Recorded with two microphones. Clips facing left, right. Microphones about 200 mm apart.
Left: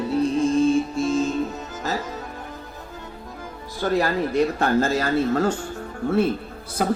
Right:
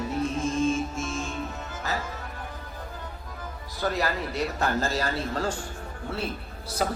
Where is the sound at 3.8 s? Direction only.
50° left (ahead or behind).